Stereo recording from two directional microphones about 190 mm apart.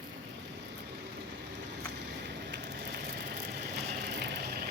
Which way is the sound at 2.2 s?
65° right (ahead or behind).